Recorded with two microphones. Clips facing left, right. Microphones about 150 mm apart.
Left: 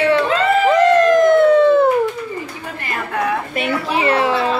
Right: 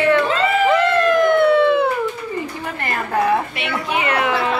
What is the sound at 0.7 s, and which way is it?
Police car, 40° left (ahead or behind).